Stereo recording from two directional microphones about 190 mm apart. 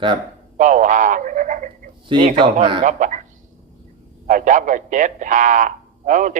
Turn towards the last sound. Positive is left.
turn(degrees=-40)  # may be behind; listen again after turning